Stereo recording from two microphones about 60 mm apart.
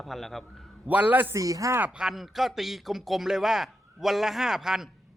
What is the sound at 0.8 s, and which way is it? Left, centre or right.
Speech, right.